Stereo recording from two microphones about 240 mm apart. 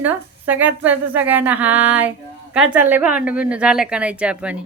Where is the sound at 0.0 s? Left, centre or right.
Centre.